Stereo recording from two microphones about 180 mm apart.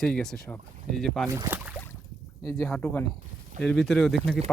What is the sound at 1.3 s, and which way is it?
Speech, 15° right (ahead or behind).